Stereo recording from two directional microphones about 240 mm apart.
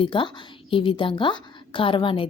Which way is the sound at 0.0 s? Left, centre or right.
Left.